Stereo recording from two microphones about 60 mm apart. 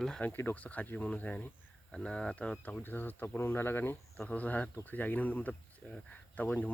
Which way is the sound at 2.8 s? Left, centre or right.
Left.